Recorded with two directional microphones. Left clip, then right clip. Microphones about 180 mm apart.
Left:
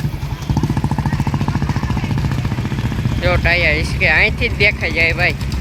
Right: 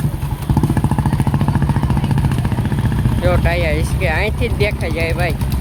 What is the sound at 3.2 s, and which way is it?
Speech, centre (ahead or behind).